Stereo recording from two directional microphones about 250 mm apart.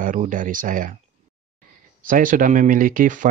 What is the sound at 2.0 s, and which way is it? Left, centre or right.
Speech, right.